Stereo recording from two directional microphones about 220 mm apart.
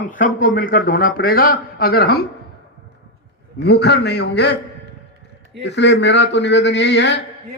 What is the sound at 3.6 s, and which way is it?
Speech, 50° left (ahead or behind).